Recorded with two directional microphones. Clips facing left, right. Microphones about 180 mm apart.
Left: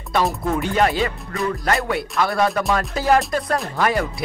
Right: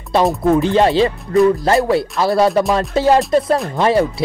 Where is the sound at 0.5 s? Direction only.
30° right (ahead or behind).